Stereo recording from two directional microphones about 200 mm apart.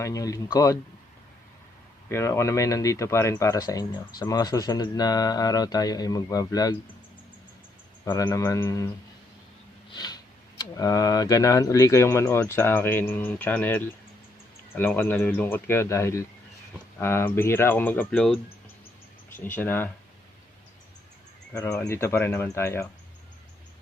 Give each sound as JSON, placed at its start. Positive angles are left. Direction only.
{"t": 0.0, "sound": "speech", "side_deg": 15}
{"t": 2.0, "sound": "speech", "side_deg": 15}
{"t": 8.0, "sound": "speech", "side_deg": 20}
{"t": 9.9, "sound": "sniff", "side_deg": 20}
{"t": 10.6, "sound": "speech", "side_deg": 20}
{"t": 19.5, "sound": "speech", "side_deg": 10}
{"t": 21.5, "sound": "speech", "side_deg": 10}